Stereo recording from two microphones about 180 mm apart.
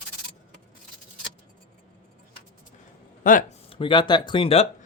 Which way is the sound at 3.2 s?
50° left (ahead or behind).